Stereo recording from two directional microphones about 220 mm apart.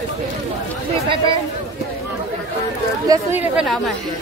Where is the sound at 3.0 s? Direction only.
15° right (ahead or behind).